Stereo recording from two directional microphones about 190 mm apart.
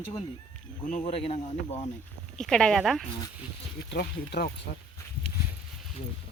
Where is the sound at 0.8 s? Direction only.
40° left (ahead or behind).